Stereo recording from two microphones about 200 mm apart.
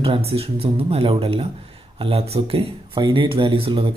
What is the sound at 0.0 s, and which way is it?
Speech, 30° right (ahead or behind).